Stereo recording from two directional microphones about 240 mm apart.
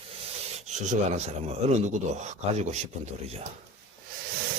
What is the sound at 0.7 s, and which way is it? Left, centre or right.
Speech, right.